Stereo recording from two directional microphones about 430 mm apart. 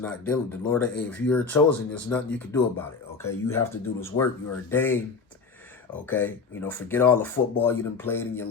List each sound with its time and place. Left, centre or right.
0.0 s speech: centre
6.1 s speech: centre